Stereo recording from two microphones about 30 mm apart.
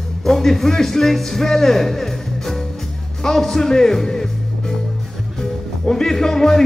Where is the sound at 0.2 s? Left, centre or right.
Centre.